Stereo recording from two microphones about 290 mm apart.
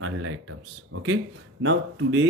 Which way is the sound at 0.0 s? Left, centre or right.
Right.